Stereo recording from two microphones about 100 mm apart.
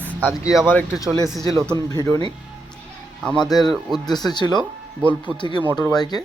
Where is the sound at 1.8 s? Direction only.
30° left (ahead or behind).